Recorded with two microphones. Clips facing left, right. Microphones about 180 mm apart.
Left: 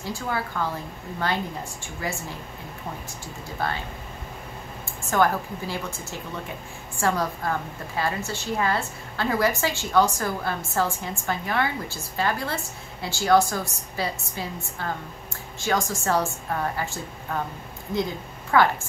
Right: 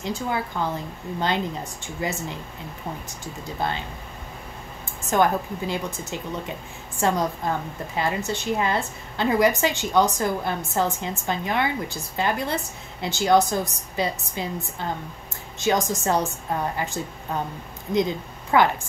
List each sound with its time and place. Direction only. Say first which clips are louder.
0.0 s a woman's voice: right 2 dB; 20° right (ahead or behind)
3.5 s a woman's voice: right 1 dB; 20° right (ahead or behind)
5.1 s a woman's voice: right 1 dB; 20° right (ahead or behind)
18.5 s a woman's voice: right 1 dB; 20° right (ahead or behind)